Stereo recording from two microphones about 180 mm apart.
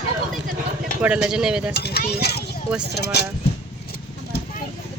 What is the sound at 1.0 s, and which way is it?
Speech, 5° right (ahead or behind).